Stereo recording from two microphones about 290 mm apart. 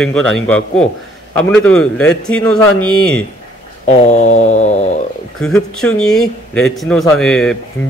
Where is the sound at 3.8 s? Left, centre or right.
Left.